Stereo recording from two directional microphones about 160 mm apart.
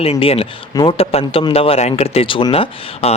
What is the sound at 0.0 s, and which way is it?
Speech, 40° left (ahead or behind).